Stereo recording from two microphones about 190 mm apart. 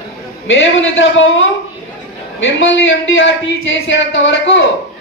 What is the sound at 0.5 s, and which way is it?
Speech, 75° left (ahead or behind).